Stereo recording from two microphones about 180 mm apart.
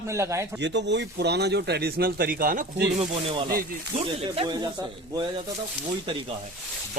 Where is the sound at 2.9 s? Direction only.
30° right (ahead or behind).